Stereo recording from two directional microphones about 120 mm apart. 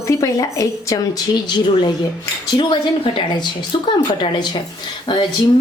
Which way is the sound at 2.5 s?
40° left (ahead or behind).